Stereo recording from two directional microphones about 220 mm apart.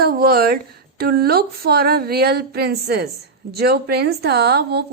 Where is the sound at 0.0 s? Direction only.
45° right (ahead or behind).